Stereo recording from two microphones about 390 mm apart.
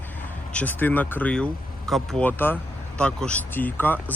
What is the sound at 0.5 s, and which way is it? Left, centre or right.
Speech, centre.